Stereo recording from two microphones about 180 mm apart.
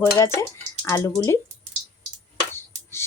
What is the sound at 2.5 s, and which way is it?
Music, 15° left (ahead or behind).